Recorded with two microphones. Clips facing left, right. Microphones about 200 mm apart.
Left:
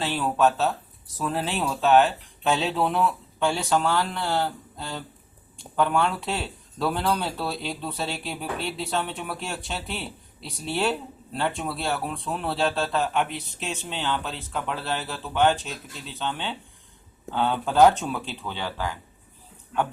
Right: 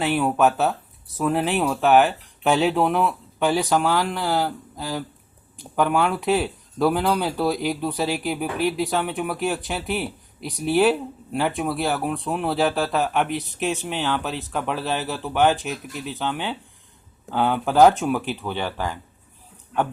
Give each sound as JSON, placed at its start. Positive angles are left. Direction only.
{"t": 0.2, "sound": "speech", "side_deg": -15}
{"t": 5.7, "sound": "speech", "side_deg": -15}